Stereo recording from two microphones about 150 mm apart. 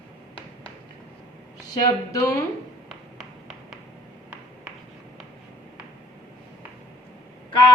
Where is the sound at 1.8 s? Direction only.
20° left (ahead or behind).